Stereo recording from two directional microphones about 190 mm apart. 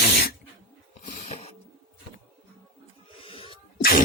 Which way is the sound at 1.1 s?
35° left (ahead or behind).